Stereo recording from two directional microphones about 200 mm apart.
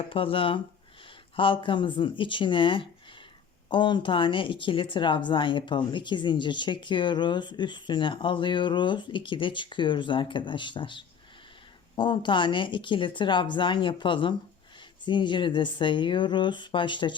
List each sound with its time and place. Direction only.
0.1 s speech: 25° left (ahead or behind)